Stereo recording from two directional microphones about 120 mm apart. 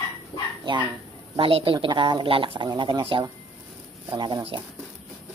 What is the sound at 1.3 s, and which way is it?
Speech, 50° right (ahead or behind).